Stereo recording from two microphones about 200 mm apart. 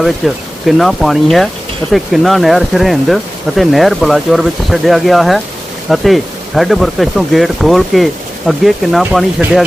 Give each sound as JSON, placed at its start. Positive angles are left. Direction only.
{"t": 0.2, "sound": "speech", "side_deg": 0}